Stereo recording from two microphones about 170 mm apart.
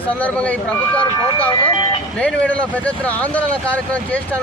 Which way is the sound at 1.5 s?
30° left (ahead or behind).